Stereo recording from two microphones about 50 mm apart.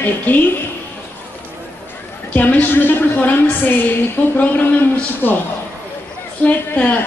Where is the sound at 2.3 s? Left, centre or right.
Left.